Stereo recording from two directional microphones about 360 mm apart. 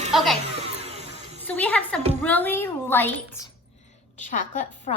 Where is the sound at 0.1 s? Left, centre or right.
Centre.